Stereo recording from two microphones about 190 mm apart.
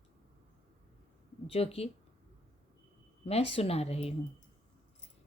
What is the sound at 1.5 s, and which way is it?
Speech, 30° left (ahead or behind).